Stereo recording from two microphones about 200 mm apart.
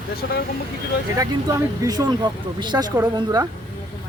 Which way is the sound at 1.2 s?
20° right (ahead or behind).